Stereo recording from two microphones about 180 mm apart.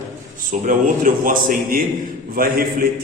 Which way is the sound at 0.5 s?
45° right (ahead or behind).